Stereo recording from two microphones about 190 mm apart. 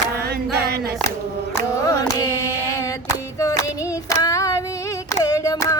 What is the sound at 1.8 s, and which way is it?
Carnatic music, 20° left (ahead or behind).